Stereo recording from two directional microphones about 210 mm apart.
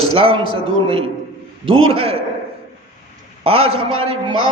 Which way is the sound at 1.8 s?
25° right (ahead or behind).